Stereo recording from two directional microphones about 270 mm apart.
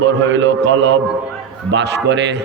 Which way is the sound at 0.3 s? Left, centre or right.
Right.